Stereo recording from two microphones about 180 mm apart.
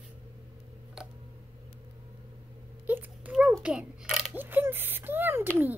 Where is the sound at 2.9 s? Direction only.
10° right (ahead or behind).